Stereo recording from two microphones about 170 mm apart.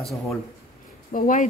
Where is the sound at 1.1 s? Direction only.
55° left (ahead or behind).